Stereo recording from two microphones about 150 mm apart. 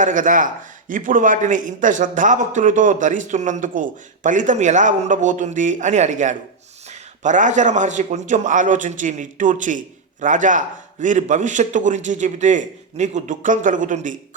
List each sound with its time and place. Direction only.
0.0 s a man's voice: 60° right (ahead or behind)